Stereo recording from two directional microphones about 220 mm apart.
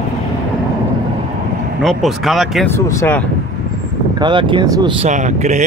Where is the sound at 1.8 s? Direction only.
Centre (ahead or behind).